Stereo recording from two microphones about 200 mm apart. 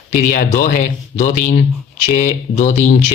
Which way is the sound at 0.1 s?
40° left (ahead or behind).